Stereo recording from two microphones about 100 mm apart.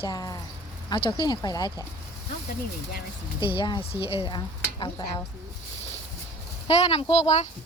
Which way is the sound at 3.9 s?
65° left (ahead or behind).